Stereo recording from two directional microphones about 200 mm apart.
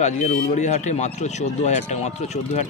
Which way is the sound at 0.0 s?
35° left (ahead or behind).